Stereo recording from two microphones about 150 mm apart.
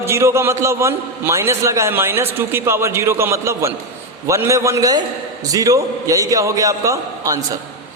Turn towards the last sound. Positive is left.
turn(degrees=-20)  # may be behind; listen again after turning